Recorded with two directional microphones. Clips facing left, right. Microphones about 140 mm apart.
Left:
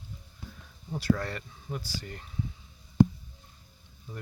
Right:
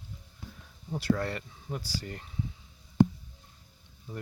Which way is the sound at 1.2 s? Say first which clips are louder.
Right 2 dB; 25° right (ahead or behind).